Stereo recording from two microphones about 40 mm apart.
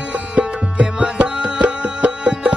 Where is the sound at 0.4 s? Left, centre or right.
Right.